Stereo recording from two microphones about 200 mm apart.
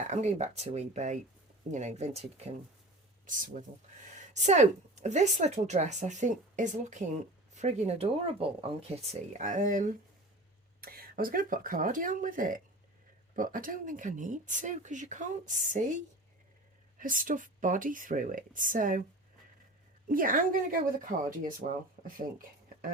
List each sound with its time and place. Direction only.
0.1 s speech: 35° right (ahead or behind)
17.0 s speech: 45° right (ahead or behind)
20.1 s speech: 45° right (ahead or behind)